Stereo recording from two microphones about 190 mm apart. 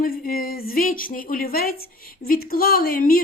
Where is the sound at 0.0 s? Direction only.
50° left (ahead or behind).